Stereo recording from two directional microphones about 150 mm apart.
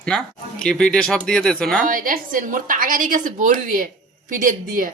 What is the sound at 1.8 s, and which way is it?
A woman's voice, 65° right (ahead or behind).